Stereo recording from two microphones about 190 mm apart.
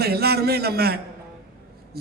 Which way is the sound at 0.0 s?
55° right (ahead or behind).